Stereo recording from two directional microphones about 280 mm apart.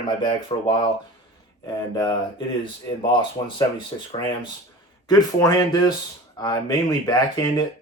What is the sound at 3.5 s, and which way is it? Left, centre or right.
Speech, centre.